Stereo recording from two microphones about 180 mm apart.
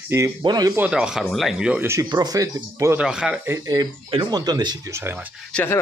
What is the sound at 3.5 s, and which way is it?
Speech, 20° right (ahead or behind).